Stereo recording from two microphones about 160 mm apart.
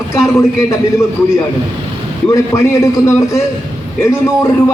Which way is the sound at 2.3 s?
20° left (ahead or behind).